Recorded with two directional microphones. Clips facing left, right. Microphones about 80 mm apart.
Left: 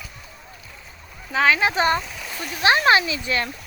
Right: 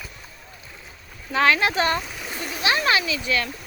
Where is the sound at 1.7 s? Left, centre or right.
Centre.